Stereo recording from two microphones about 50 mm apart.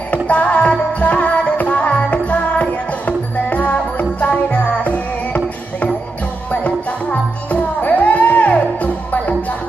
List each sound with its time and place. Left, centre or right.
0.1 s music: left